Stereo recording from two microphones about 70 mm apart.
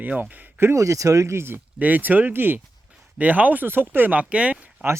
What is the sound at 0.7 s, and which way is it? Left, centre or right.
Speech, right.